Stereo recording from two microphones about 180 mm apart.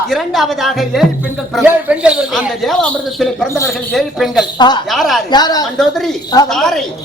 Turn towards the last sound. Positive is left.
turn(degrees=0)  # may be behind; listen again after turning